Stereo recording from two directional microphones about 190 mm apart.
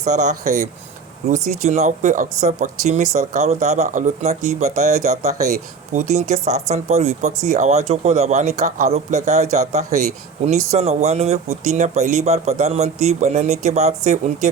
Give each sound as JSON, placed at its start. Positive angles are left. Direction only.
{"t": 0.0, "sound": "speech", "side_deg": -40}
{"t": 1.6, "sound": "speech", "side_deg": -35}